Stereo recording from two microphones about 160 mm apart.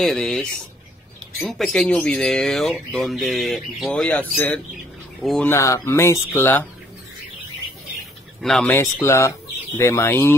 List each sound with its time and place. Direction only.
0.0 s speech: 5° left (ahead or behind)
5.5 s speech: 15° left (ahead or behind)
8.4 s speech: 5° left (ahead or behind)
9.0 s speech: 20° left (ahead or behind)